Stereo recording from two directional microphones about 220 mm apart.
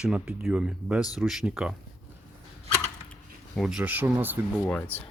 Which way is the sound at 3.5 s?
5° right (ahead or behind).